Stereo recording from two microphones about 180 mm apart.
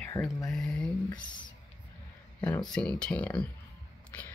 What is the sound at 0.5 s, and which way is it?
Speech, 5° left (ahead or behind).